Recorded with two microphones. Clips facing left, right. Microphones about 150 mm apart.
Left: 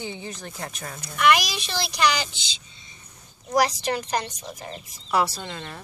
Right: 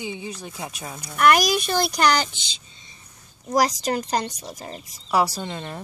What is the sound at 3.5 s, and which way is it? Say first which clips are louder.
Speech: right 1 dB; 40° right (ahead or behind).